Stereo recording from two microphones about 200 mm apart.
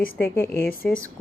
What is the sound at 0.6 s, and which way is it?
Speech, 50° left (ahead or behind).